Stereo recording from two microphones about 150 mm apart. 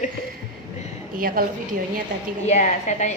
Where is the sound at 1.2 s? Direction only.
70° right (ahead or behind).